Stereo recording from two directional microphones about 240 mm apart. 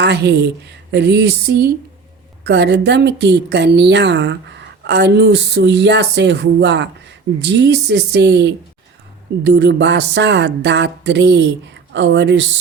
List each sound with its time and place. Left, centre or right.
0.0 s a woman's voice: right